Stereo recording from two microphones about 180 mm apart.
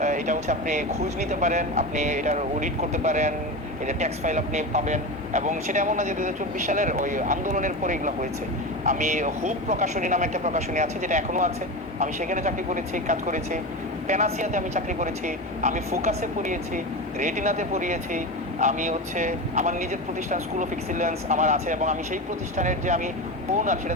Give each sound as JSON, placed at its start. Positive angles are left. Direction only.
{"t": 0.0, "sound": "speech", "side_deg": -40}